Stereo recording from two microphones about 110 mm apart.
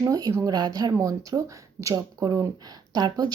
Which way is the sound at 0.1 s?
35° right (ahead or behind).